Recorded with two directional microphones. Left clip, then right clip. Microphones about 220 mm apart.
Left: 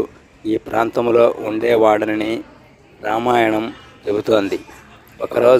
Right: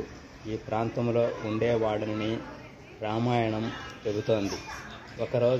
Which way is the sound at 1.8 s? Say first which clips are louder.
Left 15 dB; 55° left (ahead or behind).